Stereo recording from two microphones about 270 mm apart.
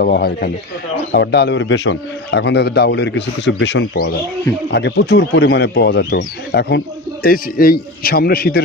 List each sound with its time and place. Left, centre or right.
0.0 s a man's voice: left